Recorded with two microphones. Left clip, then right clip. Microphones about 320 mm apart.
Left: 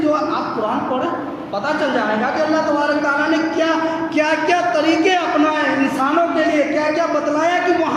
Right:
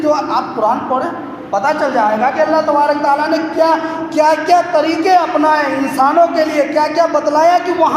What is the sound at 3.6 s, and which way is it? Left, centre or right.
Speech, centre.